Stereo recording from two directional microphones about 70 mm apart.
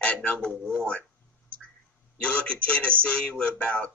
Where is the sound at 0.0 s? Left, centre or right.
Centre.